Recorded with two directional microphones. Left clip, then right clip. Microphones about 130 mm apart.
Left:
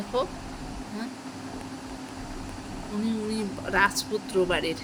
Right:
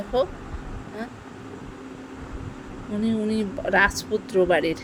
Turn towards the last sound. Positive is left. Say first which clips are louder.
# right 5 dB
turn(degrees=-60)  # may be behind; listen again after turning